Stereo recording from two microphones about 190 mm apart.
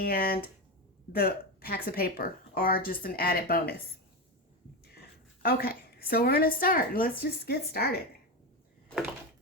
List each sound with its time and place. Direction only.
0.0 s speech: 50° left (ahead or behind)
4.9 s a woman's voice: 55° left (ahead or behind)